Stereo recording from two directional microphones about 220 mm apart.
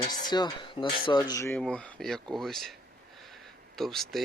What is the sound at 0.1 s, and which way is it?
Speech, 20° left (ahead or behind).